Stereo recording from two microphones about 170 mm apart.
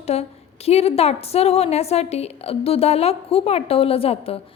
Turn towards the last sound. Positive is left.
turn(degrees=35)  # may be behind; listen again after turning